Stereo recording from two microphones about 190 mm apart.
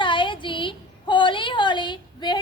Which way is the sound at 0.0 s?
25° left (ahead or behind).